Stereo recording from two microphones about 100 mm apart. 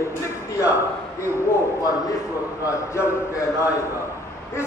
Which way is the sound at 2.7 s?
25° left (ahead or behind).